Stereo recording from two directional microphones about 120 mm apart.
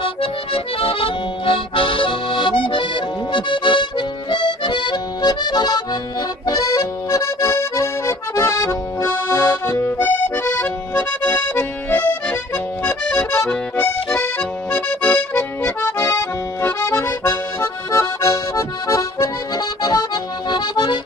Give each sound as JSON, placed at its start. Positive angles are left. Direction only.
{"t": 0.0, "sound": "accordion", "side_deg": 50}
{"t": 15.6, "sound": "accordion", "side_deg": 25}